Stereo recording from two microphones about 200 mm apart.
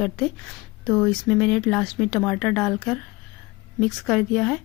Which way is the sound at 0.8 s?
5° left (ahead or behind).